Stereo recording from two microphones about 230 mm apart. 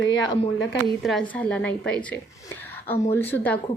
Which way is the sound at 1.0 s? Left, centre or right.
Centre.